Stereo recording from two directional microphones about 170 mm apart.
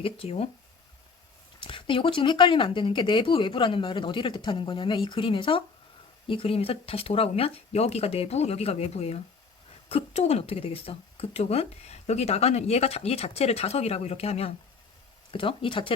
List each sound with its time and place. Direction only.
0.0 s speech: 35° left (ahead or behind)
1.6 s speech: 30° left (ahead or behind)